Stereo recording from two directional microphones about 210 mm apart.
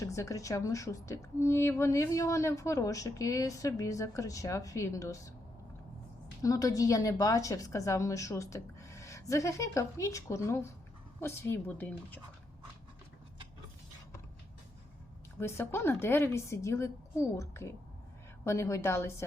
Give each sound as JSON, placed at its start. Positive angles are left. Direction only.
{"t": 0.0, "sound": "speech", "side_deg": 15}
{"t": 6.4, "sound": "speech", "side_deg": 15}
{"t": 15.4, "sound": "speech", "side_deg": 10}